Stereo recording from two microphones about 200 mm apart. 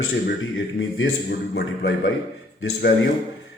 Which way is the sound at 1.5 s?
55° left (ahead or behind).